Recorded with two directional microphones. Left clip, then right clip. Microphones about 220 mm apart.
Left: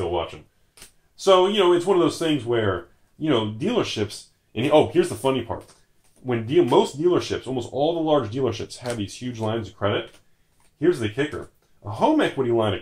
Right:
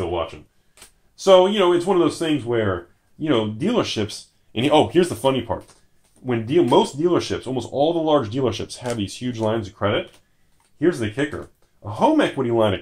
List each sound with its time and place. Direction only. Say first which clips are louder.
1.1 s speech: right 3 dB; 40° right (ahead or behind)